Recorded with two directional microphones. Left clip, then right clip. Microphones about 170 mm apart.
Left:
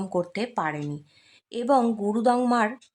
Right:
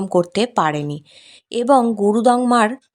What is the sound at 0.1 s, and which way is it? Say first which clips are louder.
A woman's voice: right 11 dB; 35° right (ahead or behind).